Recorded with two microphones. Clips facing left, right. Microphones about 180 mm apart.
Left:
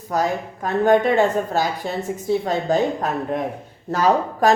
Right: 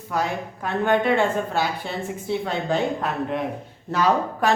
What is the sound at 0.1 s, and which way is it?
A woman's voice, 40° left (ahead or behind).